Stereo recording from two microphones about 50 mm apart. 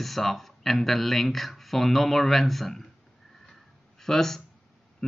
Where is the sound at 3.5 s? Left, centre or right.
Centre.